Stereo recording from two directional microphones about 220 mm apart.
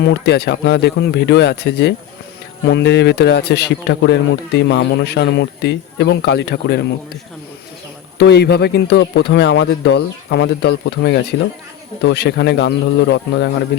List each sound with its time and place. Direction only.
0.0 s speech: 50° left (ahead or behind)
8.2 s speech: 50° left (ahead or behind)